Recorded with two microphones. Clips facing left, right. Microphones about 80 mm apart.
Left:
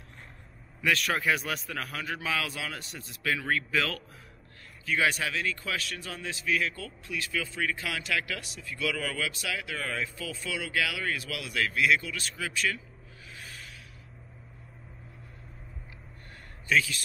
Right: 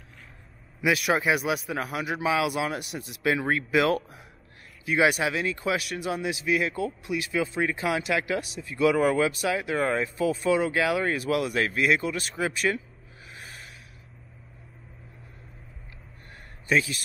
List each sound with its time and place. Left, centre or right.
0.7 s a man's voice: centre
7.5 s speech: right
16.6 s a man's voice: right